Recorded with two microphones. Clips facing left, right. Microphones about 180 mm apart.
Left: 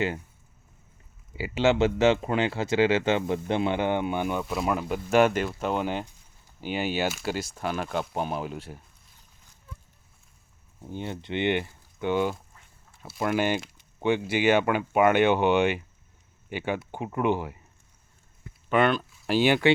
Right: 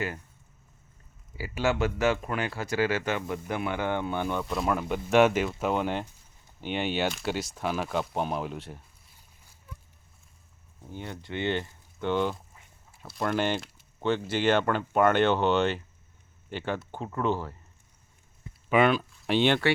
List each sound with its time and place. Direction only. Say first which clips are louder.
1.4 s speech: left 5 dB; 25° left (ahead or behind); by 8.8 s centre (ahead or behind)
10.8 s speech: left 5 dB; 20° left (ahead or behind); by 12.4 s 5° left (ahead or behind)
12.5 s duck: even; 5° right (ahead or behind)
13.1 s speech: left 2 dB; 5° left (ahead or behind)
18.7 s speech: even; 5° right (ahead or behind)